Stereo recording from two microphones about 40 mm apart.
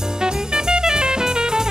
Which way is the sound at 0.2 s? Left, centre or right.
Centre.